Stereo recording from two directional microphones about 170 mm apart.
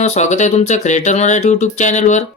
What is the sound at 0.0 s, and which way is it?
Speech, 45° left (ahead or behind).